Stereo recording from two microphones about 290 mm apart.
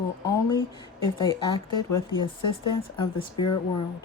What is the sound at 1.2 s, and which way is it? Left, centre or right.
A woman's voice, centre.